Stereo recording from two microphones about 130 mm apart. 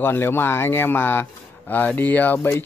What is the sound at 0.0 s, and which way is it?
Speech, 15° left (ahead or behind).